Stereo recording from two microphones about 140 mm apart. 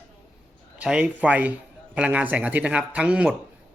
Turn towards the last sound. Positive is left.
turn(degrees=-10)  # may be behind; listen again after turning